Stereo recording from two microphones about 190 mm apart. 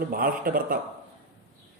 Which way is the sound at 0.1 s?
50° right (ahead or behind).